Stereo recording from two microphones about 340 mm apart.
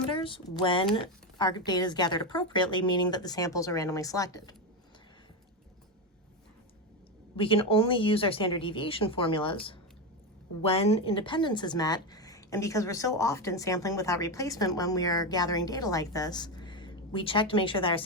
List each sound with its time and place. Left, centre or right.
0.1 s a sound: centre
0.5 s speech: centre
7.3 s speech: centre